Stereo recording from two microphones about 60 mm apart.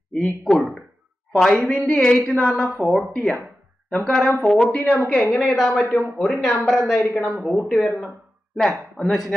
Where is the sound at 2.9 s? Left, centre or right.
Centre.